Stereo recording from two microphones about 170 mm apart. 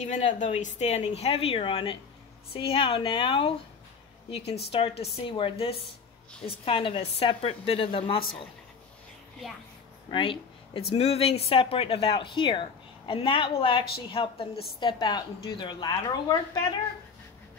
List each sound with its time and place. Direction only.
0.0 s speech: 45° left (ahead or behind)
10.1 s a woman's voice: 30° left (ahead or behind)